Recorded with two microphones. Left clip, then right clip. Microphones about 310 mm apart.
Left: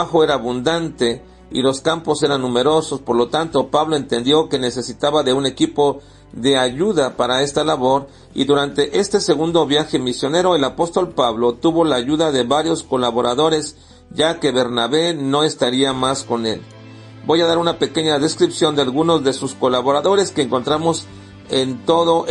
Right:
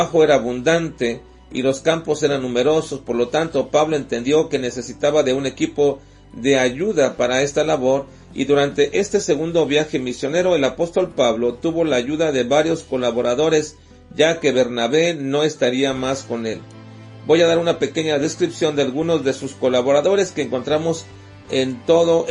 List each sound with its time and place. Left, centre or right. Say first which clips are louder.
0.1 s speech: right 1 dB; centre